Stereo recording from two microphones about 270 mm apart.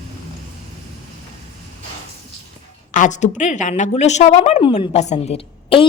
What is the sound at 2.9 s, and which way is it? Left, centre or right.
A woman's voice, left.